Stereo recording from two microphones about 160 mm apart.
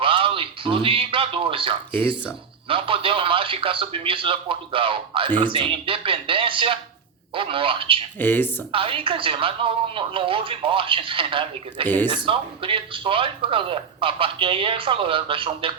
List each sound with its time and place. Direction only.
0.0 s speech: 35° right (ahead or behind)
8.2 s speech: 10° left (ahead or behind)
8.7 s speech: 35° right (ahead or behind)